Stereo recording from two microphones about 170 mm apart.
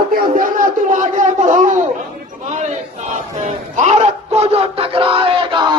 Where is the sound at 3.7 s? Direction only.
40° right (ahead or behind).